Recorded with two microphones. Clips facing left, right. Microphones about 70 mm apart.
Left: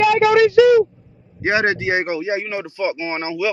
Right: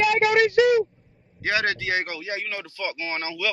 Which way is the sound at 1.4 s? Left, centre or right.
Left.